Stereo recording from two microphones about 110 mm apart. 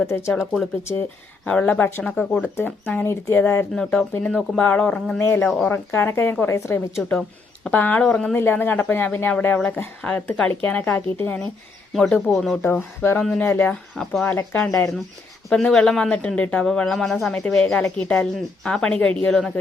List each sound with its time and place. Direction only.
0.1 s speech: 25° left (ahead or behind)
1.5 s speech: 10° left (ahead or behind)
4.2 s speech: 5° left (ahead or behind)
5.5 s speech: 5° left (ahead or behind)
5.7 s speech: 20° left (ahead or behind)
7.1 s speech: 10° left (ahead or behind)
8.4 s speech: 20° left (ahead or behind)
11.9 s speech: centre (ahead or behind)
12.6 s speech: 20° left (ahead or behind)
13.9 s speech: 5° left (ahead or behind)
14.3 s speech: 20° left (ahead or behind)
15.4 s speech: 5° left (ahead or behind)